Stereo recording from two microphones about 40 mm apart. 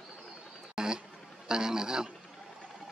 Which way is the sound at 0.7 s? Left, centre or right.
Centre.